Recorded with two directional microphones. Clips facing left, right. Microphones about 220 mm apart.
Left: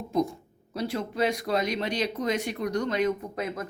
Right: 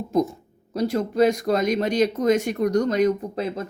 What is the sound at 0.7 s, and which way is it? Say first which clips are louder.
Speech: right 7 dB; 45° right (ahead or behind).